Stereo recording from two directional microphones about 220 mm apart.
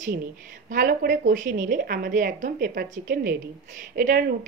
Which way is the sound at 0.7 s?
35° right (ahead or behind).